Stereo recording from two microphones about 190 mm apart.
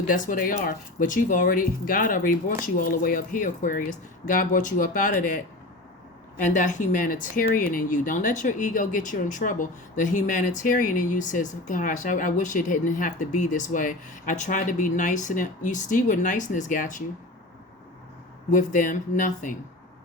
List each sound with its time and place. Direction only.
0.1 s speech: 45° left (ahead or behind)
6.4 s speech: 40° left (ahead or behind)
18.5 s speech: 45° left (ahead or behind)